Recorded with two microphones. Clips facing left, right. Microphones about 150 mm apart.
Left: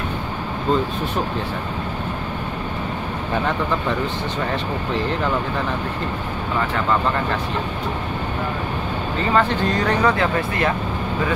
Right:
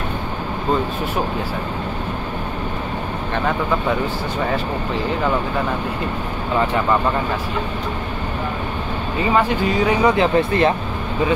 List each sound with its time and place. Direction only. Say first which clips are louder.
9.2 s speech: right 1 dB; 10° right (ahead or behind)
10.1 s speech: right 5 dB; 20° right (ahead or behind)